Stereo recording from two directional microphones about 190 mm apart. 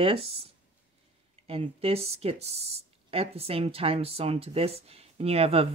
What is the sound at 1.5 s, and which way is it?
Speech, 30° right (ahead or behind).